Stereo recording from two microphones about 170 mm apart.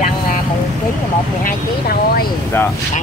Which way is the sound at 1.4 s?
60° left (ahead or behind).